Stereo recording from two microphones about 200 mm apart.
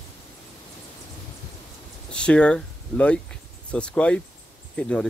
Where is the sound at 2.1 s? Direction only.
5° left (ahead or behind).